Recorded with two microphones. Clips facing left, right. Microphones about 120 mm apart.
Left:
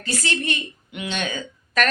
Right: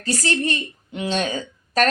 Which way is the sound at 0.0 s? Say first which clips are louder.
Right 4 dB; 40° right (ahead or behind).